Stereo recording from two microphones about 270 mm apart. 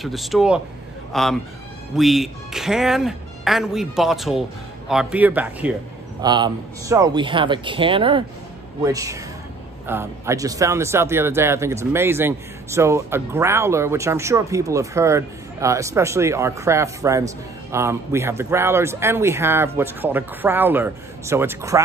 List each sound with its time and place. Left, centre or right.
0.0 s speech: centre